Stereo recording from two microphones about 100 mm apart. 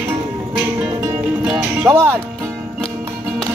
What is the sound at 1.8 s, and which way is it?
Music, 10° left (ahead or behind).